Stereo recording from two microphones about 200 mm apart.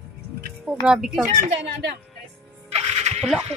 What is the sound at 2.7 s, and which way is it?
Music, 35° right (ahead or behind).